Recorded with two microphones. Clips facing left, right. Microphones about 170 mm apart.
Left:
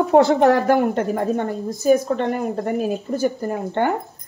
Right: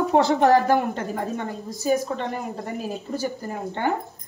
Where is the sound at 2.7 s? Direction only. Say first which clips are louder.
Left 7 dB; 60° left (ahead or behind).